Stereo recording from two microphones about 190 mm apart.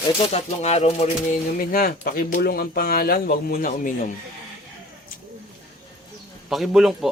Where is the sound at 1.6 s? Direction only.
50° left (ahead or behind).